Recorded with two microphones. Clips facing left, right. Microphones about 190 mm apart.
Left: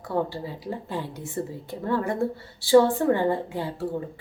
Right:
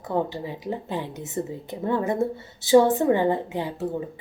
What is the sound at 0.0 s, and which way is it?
A woman's voice, 20° right (ahead or behind).